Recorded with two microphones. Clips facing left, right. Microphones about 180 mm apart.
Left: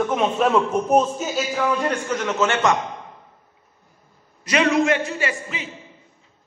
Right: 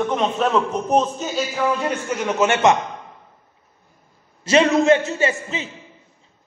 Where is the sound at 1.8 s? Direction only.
10° right (ahead or behind).